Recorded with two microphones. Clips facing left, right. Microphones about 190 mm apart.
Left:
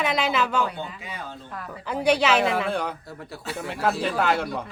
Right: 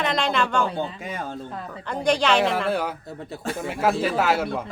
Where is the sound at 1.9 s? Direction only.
5° left (ahead or behind).